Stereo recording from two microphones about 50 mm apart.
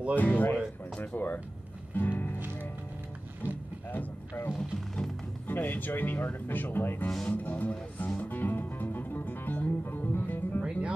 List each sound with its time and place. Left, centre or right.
0.1 s speech: left
2.0 s music: left
3.4 s a sound: left
4.7 s music: centre
5.5 s speech: left
7.2 s speech: left
8.2 s music: left